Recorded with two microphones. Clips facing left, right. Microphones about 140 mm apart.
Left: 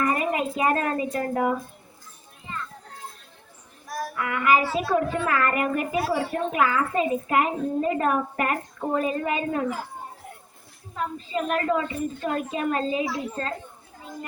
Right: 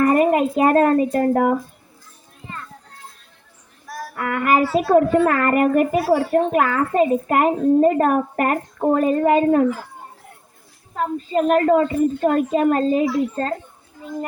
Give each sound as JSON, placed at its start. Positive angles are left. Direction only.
{"t": 0.0, "sound": "speech", "side_deg": -50}
{"t": 4.1, "sound": "a woman's voice", "side_deg": -50}
{"t": 6.1, "sound": "speech", "side_deg": -35}
{"t": 6.5, "sound": "a woman's voice", "side_deg": -50}
{"t": 10.9, "sound": "a woman's voice", "side_deg": -45}